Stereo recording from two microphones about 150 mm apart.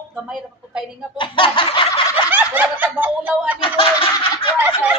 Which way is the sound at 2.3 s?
10° right (ahead or behind).